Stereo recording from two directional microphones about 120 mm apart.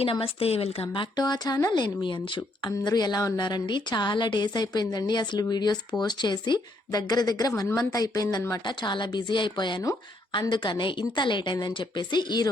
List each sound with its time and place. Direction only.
0.0 s speech: 55° left (ahead or behind)
1.1 s speech: 35° left (ahead or behind)